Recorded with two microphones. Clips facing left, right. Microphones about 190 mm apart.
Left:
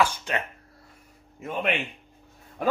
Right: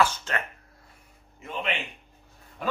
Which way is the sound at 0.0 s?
15° left (ahead or behind).